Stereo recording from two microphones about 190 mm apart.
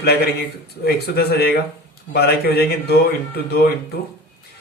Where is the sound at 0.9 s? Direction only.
55° left (ahead or behind).